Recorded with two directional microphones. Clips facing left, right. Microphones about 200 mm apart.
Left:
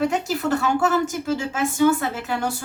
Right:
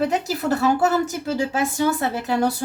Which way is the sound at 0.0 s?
35° right (ahead or behind).